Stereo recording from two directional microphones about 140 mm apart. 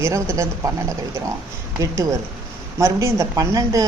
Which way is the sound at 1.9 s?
20° right (ahead or behind).